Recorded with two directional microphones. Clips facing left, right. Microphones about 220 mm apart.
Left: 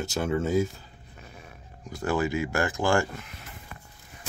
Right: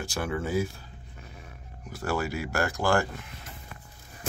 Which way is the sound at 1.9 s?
15° left (ahead or behind).